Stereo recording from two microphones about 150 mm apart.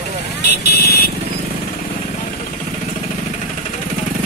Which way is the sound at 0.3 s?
90° left.